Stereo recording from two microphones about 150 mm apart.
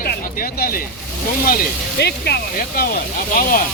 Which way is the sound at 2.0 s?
90° left.